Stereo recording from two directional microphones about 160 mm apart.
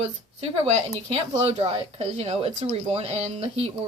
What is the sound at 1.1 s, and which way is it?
Speech, 40° right (ahead or behind).